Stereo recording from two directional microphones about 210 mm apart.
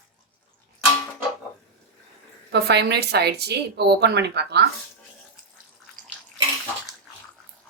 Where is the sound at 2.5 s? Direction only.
50° right (ahead or behind).